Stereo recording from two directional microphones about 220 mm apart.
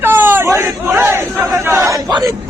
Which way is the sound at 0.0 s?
10° right (ahead or behind).